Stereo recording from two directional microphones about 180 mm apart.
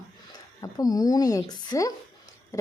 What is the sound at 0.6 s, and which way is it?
A woman's voice, 20° left (ahead or behind).